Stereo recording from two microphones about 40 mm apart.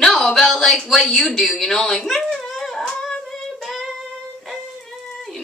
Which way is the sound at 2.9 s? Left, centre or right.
Centre.